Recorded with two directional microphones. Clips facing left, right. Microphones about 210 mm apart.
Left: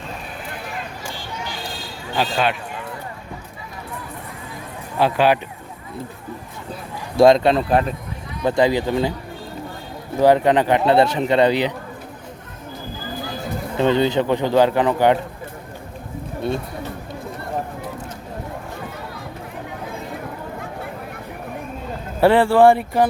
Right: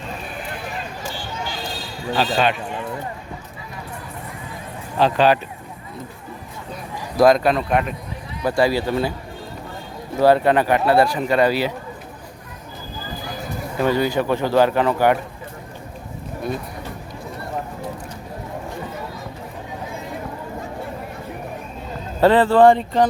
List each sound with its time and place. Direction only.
2.1 s speech: 5° left (ahead or behind)
4.9 s speech: 10° left (ahead or behind)
7.2 s speech: 25° left (ahead or behind)
8.4 s speech: 20° left (ahead or behind)
10.2 s speech: 15° left (ahead or behind)
13.7 s speech: 25° left (ahead or behind)
22.2 s speech: 10° left (ahead or behind)